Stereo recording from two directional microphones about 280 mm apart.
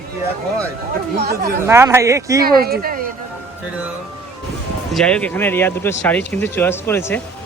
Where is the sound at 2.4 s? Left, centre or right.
Right.